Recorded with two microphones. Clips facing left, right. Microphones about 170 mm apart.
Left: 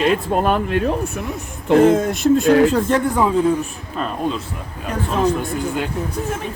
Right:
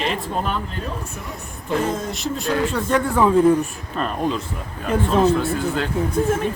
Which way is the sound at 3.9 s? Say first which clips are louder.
Even; centre (ahead or behind).